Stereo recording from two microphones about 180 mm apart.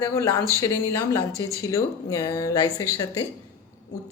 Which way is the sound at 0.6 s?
20° left (ahead or behind).